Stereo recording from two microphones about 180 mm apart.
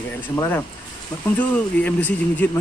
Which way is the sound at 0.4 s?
15° left (ahead or behind).